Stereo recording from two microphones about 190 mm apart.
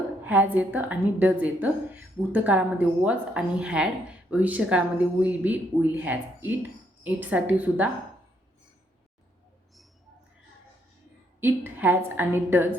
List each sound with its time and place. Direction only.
0.3 s a woman's voice: 10° right (ahead or behind)
11.3 s a woman's voice: 10° right (ahead or behind)